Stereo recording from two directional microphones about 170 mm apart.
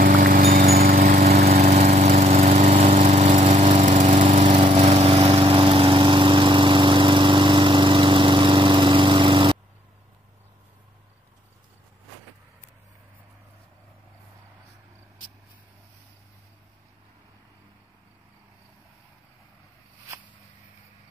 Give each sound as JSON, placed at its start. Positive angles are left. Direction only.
{"t": 0.0, "sound": "lawn mower", "side_deg": -55}